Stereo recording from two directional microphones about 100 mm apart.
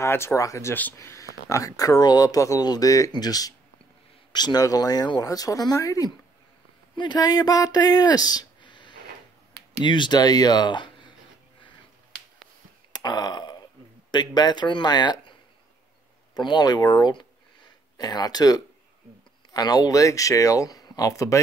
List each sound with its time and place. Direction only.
0.0 s speech: 25° left (ahead or behind)
7.0 s speech: 45° left (ahead or behind)
12.9 s burping: 45° left (ahead or behind)
14.3 s speech: 45° left (ahead or behind)
16.3 s speech: 45° left (ahead or behind)